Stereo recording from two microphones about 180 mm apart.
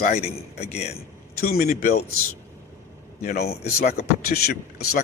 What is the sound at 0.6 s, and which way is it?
Speech, 35° left (ahead or behind).